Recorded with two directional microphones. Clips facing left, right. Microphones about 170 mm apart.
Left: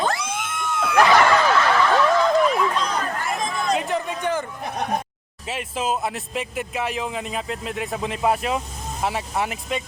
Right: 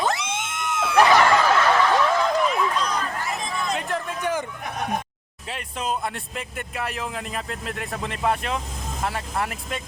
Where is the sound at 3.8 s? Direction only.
Centre (ahead or behind).